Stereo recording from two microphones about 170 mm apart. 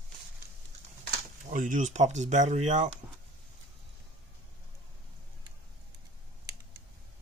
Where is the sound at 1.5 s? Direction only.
50° right (ahead or behind).